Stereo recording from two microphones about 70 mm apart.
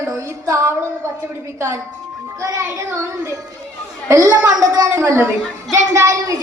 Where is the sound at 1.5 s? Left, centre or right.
Right.